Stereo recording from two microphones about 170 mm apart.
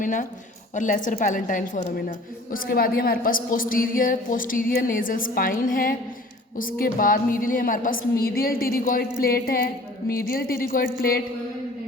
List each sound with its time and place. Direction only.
0.0 s a woman's voice: 50° left (ahead or behind)